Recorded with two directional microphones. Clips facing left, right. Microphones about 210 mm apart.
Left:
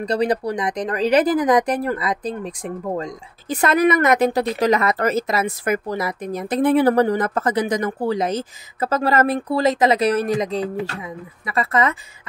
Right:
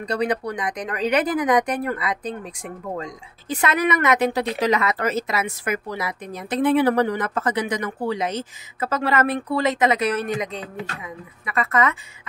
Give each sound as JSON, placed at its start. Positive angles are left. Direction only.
{"t": 0.0, "sound": "speech", "side_deg": 35}